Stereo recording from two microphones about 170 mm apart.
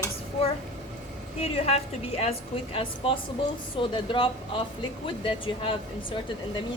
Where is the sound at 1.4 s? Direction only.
35° left (ahead or behind).